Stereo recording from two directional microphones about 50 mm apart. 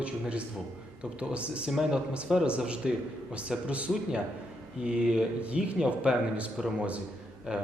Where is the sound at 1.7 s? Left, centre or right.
Centre.